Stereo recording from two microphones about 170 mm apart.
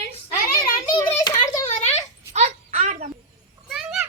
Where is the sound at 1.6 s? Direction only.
40° left (ahead or behind).